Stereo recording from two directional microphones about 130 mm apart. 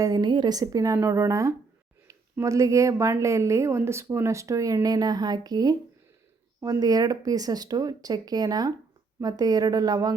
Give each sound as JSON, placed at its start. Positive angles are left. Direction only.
{"t": 0.0, "sound": "a woman's voice", "side_deg": -30}